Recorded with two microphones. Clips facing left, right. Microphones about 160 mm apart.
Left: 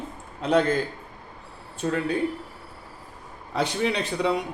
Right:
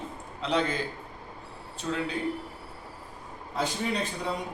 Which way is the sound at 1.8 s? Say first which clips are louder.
Left 5 dB; 55° left (ahead or behind).